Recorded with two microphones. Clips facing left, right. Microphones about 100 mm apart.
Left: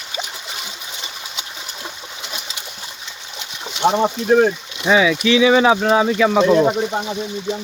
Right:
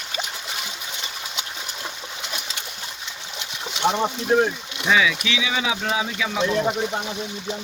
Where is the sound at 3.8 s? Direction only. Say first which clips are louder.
Left 6 dB; 30° left (ahead or behind); by 6.5 s 55° left (ahead or behind).